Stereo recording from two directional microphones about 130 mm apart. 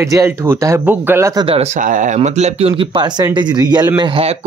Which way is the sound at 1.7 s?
85° right.